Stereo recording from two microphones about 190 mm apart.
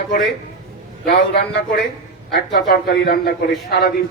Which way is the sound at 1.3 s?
60° left (ahead or behind).